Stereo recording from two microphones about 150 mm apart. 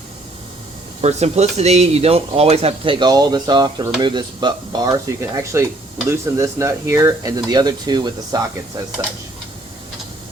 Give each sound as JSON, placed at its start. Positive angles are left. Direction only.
{"t": 1.0, "sound": "speech", "side_deg": -45}